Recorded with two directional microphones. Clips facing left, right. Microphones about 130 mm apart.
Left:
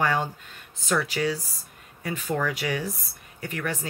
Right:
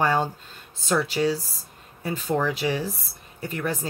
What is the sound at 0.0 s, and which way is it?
Speech, 30° right (ahead or behind).